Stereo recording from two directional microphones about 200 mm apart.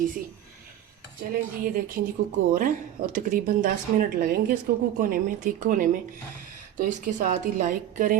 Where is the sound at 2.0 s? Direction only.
50° right (ahead or behind).